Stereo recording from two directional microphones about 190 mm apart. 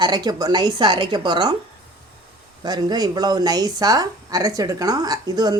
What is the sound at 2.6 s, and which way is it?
A woman's voice, 20° right (ahead or behind).